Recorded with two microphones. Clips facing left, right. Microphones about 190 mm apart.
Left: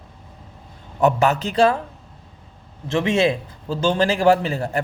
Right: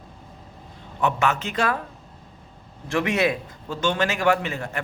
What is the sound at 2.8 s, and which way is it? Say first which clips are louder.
A man's voice: left 3 dB; 25° left (ahead or behind).